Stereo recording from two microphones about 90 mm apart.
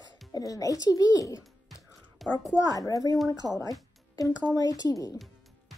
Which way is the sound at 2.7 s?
40° left (ahead or behind).